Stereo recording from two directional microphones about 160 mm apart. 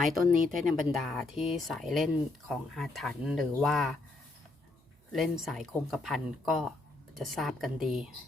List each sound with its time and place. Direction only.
0.3 s speech: 60° right (ahead or behind)
0.7 s speech: centre (ahead or behind)
5.1 s speech: centre (ahead or behind)